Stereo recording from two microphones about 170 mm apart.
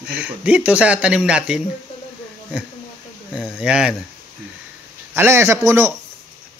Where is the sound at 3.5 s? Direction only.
5° right (ahead or behind).